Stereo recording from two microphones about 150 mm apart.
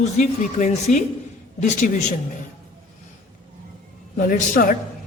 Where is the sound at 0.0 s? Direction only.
50° left (ahead or behind).